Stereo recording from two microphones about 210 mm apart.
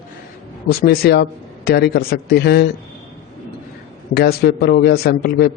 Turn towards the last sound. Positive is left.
turn(degrees=50)  # may be behind; listen again after turning